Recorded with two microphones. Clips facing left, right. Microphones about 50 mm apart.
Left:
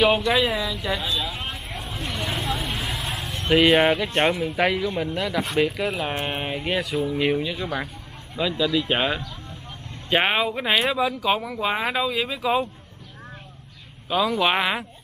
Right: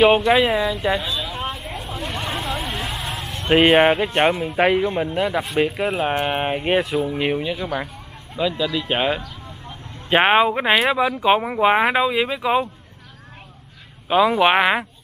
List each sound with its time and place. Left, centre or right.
0.0 s a man's voice: right
1.1 s vehicle: centre
2.0 s a sound: right
2.9 s vehicle: right
3.9 s a man's voice: right
4.2 s speech: right
4.5 s a man's voice: right
8.4 s speech: centre
10.0 s speech: right
11.2 s speech: right
14.0 s a man's voice: right